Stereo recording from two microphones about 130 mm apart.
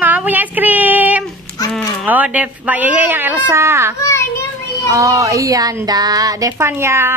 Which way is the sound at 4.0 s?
20° left (ahead or behind).